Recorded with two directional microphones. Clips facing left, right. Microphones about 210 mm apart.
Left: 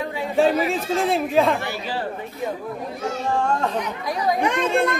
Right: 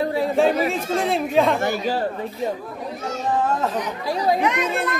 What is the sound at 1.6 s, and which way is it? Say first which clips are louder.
Speech: right 5 dB; 45° right (ahead or behind).